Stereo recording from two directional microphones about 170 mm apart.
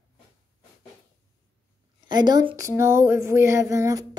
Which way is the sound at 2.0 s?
25° right (ahead or behind).